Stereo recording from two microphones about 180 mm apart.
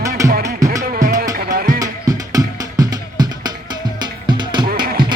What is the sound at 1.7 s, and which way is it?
Music, 20° right (ahead or behind).